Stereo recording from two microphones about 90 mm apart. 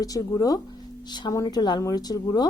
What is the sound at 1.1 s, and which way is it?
A woman's voice, 55° left (ahead or behind).